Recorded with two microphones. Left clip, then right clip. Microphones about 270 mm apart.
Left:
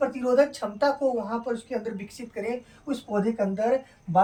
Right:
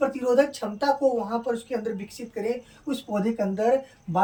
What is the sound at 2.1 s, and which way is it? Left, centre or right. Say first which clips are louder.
Speech: right 1 dB; centre.